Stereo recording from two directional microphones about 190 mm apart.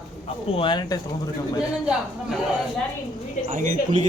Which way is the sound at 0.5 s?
25° left (ahead or behind).